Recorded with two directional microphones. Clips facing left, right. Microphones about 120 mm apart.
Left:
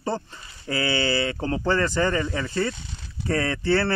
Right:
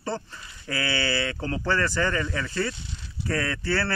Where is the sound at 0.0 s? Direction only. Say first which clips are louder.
Left 3 dB; 20° left (ahead or behind).